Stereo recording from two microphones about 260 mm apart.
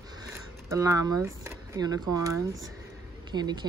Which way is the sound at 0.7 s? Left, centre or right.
Centre.